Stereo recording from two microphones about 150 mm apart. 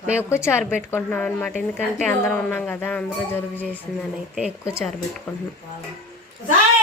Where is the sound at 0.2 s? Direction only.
15° left (ahead or behind).